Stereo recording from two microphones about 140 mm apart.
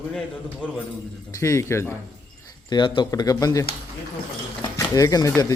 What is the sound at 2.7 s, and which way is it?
Speech, 35° left (ahead or behind).